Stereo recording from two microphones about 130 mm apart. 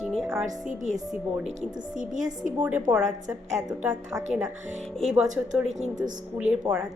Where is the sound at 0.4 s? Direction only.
70° right (ahead or behind).